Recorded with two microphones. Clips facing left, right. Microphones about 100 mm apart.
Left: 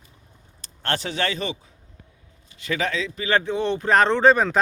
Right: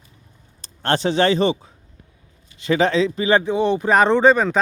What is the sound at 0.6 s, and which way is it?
Speech, 25° right (ahead or behind).